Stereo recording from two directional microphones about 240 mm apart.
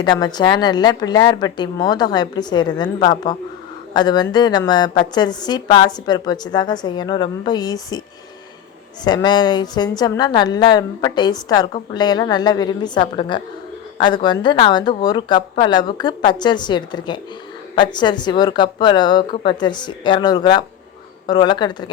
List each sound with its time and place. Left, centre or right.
0.0 s a woman's voice: centre
9.0 s a woman's voice: centre